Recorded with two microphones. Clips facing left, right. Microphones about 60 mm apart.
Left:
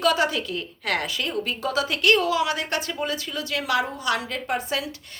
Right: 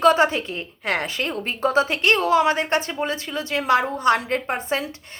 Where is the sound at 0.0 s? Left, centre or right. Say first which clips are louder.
Right 5 dB; right.